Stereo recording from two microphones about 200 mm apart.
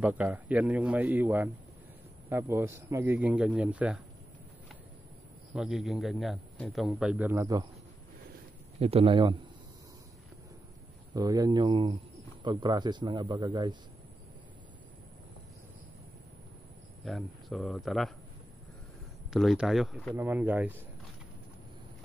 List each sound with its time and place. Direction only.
0.0 s speech: 5° right (ahead or behind)
5.5 s a man's voice: 5° right (ahead or behind)
8.7 s speech: 30° right (ahead or behind)
11.1 s speech: 20° right (ahead or behind)
17.0 s a man's voice: centre (ahead or behind)
19.3 s a man's voice: centre (ahead or behind)